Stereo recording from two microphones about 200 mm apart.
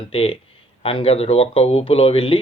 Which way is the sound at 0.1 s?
30° left (ahead or behind).